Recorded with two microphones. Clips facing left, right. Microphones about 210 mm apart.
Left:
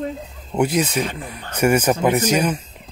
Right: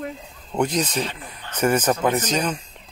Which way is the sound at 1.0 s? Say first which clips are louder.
Left 4 dB; 50° left (ahead or behind).